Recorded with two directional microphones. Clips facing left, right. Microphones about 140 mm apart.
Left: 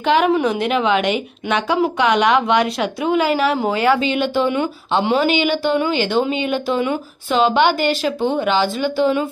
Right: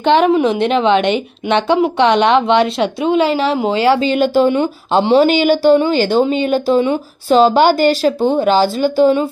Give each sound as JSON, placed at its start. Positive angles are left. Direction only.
{"t": 0.0, "sound": "a woman's voice", "side_deg": -30}
{"t": 4.0, "sound": "speech", "side_deg": -40}